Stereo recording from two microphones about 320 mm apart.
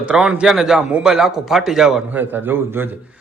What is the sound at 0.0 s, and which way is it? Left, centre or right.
A man's voice, centre.